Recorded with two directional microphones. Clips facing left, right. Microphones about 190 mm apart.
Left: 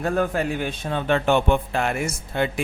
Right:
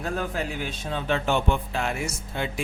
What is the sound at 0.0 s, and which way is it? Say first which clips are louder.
Speech: left 6 dB; 55° left (ahead or behind).